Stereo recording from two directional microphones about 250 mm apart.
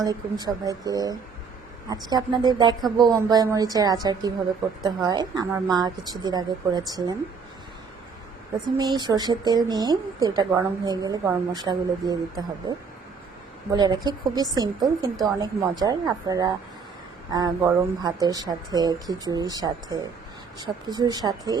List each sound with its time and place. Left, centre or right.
0.0 s speech: centre
8.8 s speech: centre